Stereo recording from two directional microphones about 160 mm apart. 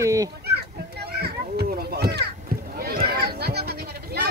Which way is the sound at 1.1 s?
80° right.